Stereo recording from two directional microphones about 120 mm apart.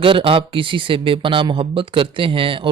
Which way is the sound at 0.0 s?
50° right (ahead or behind).